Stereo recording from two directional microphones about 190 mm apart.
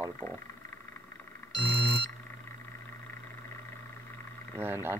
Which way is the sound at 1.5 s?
25° left (ahead or behind).